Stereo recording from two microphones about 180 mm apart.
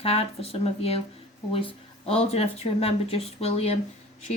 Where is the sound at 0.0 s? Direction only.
35° left (ahead or behind).